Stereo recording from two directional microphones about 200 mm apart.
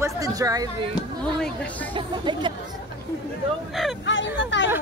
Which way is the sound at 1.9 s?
25° right (ahead or behind).